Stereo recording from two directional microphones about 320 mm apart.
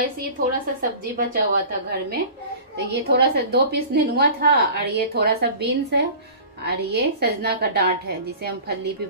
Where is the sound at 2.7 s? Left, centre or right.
Right.